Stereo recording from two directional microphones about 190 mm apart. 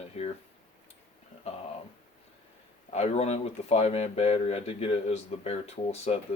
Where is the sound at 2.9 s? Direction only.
35° left (ahead or behind).